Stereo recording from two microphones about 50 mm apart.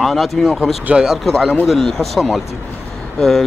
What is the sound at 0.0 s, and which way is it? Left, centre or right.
Speech, centre.